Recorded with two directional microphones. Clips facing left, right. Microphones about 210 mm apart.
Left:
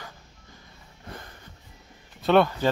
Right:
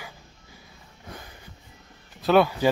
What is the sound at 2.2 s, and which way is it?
Speech, 5° right (ahead or behind).